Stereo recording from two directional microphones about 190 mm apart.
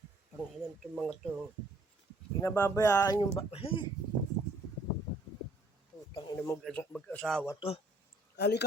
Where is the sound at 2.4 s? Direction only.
15° left (ahead or behind).